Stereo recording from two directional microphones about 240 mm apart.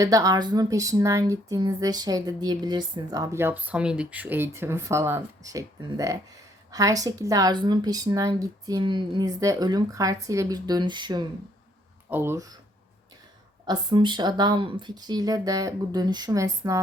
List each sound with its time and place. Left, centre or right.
0.0 s speech: centre
13.7 s speech: centre